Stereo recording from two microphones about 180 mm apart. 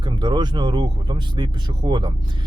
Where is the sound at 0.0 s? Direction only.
25° right (ahead or behind).